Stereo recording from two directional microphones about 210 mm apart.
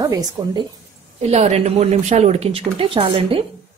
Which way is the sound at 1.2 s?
30° right (ahead or behind).